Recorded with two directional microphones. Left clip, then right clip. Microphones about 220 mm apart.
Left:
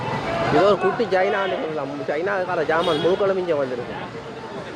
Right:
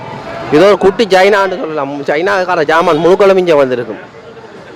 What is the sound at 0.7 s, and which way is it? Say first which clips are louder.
A man's voice: right 11 dB; 45° right (ahead or behind).